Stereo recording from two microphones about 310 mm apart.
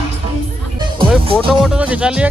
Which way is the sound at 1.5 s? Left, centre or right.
Centre.